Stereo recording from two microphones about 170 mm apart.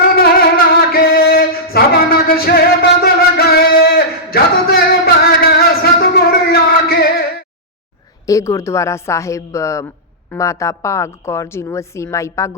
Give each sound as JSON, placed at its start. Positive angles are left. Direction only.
{"t": 0.2, "sound": "music", "side_deg": 60}
{"t": 8.3, "sound": "a woman's voice", "side_deg": 20}